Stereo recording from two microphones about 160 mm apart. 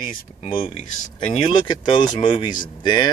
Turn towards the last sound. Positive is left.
turn(degrees=30)  # may be behind; listen again after turning